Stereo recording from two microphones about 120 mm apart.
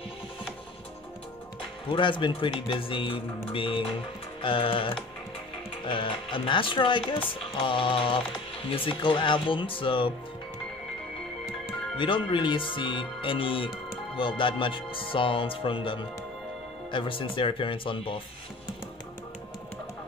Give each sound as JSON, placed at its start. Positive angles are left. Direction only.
{"t": 1.9, "sound": "speech", "side_deg": 45}
{"t": 12.3, "sound": "speech", "side_deg": 45}